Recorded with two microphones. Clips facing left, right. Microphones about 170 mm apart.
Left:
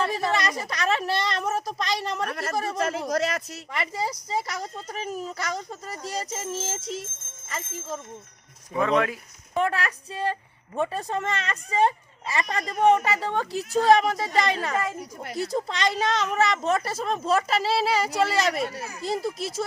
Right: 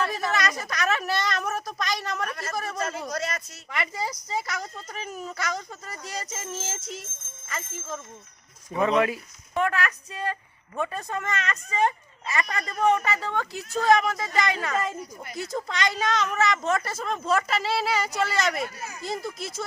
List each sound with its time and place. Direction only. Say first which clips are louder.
0.0 s a woman's voice: left 2 dB; 30° left (ahead or behind)
2.3 s speech: left 4 dB; 65° left (ahead or behind)
3.7 s speech: left 1 dB; 30° left (ahead or behind)
8.8 s speech: right 1 dB; 5° right (ahead or behind)
9.6 s speech: even; 30° left (ahead or behind)